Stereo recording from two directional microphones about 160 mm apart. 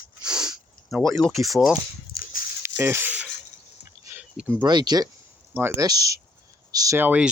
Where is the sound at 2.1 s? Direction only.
70° left (ahead or behind).